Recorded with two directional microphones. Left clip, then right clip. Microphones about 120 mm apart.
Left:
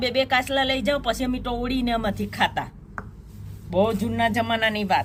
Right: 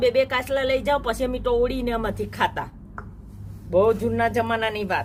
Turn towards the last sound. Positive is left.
turn(degrees=-30)  # may be behind; listen again after turning